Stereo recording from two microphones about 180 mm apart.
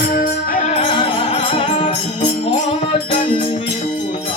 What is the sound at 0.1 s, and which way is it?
Music, 55° left (ahead or behind).